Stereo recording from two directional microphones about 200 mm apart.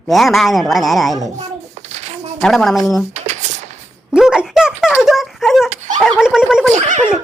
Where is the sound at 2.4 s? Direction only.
Centre (ahead or behind).